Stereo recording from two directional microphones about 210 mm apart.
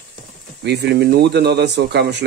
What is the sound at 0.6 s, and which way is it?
Speech, 50° right (ahead or behind).